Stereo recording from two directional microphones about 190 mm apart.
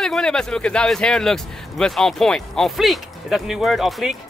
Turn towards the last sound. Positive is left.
turn(degrees=0)  # may be behind; listen again after turning